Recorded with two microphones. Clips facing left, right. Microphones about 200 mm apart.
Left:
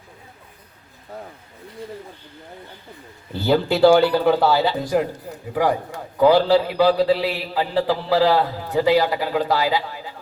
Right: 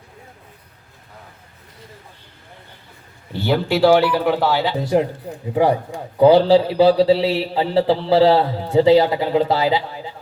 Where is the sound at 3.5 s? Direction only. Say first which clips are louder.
Even; centre (ahead or behind).